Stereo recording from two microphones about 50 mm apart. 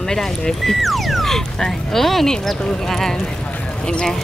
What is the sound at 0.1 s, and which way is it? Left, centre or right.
Speech, centre.